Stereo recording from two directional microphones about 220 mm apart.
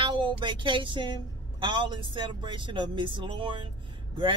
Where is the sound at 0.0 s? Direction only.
20° right (ahead or behind).